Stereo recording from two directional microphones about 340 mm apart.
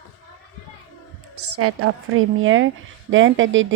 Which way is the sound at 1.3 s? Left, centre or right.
Right.